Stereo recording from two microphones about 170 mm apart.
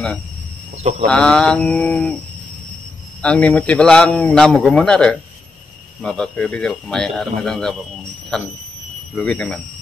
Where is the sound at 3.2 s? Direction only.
5° left (ahead or behind).